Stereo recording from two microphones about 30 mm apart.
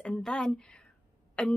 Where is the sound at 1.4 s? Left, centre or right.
Left.